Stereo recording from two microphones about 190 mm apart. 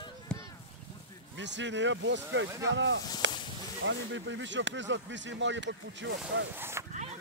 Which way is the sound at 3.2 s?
75° right (ahead or behind).